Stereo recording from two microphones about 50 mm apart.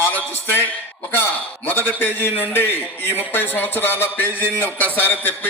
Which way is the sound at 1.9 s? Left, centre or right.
Left.